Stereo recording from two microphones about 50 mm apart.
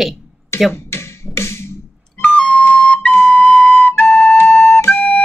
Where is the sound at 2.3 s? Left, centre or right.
Left.